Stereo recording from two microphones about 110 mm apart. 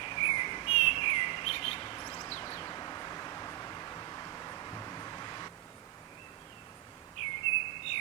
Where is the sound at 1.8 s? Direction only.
40° left (ahead or behind).